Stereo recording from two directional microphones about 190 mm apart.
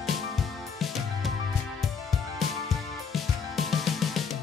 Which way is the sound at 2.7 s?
Centre (ahead or behind).